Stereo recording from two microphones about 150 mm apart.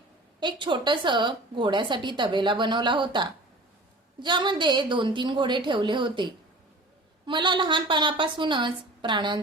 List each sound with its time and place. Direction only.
0.3 s a woman's voice: 30° right (ahead or behind)
7.3 s a woman's voice: 30° right (ahead or behind)